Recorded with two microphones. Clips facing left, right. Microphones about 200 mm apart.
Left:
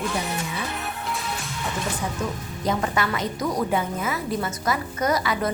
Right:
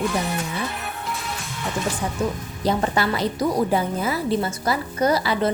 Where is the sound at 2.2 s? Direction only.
30° right (ahead or behind).